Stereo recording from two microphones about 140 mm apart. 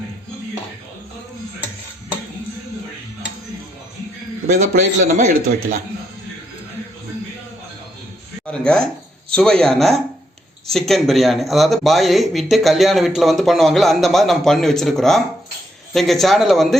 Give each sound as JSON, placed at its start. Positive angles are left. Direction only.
{"t": 4.4, "sound": "a man's voice", "side_deg": -65}
{"t": 8.4, "sound": "speech", "side_deg": 5}